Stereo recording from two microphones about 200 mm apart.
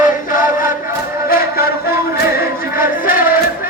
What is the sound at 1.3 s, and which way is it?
Music, 45° left (ahead or behind).